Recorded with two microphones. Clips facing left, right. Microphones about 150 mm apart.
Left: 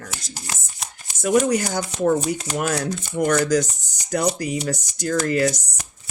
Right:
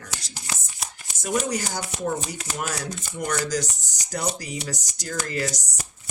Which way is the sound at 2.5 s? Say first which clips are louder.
Left 5 dB; 60° left (ahead or behind).